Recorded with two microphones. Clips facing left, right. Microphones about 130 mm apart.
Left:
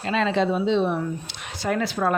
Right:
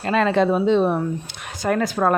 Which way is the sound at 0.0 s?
50° right (ahead or behind).